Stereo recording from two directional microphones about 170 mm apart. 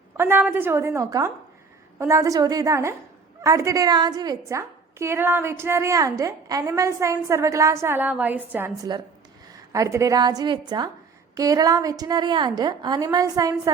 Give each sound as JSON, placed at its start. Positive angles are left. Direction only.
{"t": 0.2, "sound": "a woman's voice", "side_deg": -15}
{"t": 9.7, "sound": "a woman's voice", "side_deg": -20}